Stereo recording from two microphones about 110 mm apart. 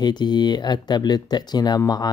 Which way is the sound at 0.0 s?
40° left (ahead or behind).